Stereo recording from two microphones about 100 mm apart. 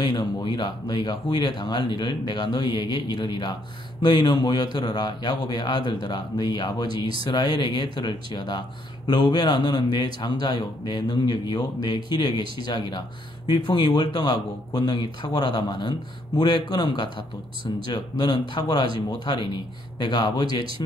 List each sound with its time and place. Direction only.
0.0 s speech: 45° left (ahead or behind)